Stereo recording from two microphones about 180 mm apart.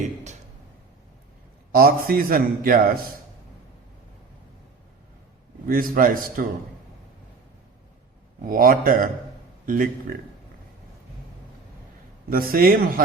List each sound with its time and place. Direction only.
1.7 s a man's voice: 55° right (ahead or behind)
5.6 s a man's voice: 50° right (ahead or behind)
8.4 s a man's voice: 50° right (ahead or behind)
12.3 s a man's voice: 55° right (ahead or behind)